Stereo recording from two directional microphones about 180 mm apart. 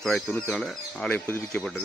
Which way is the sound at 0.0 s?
Centre (ahead or behind).